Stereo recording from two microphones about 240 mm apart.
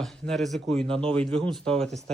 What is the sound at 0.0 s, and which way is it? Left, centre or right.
Speech, centre.